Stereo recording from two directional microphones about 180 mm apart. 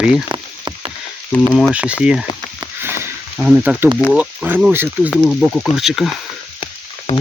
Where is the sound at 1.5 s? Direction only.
5° right (ahead or behind).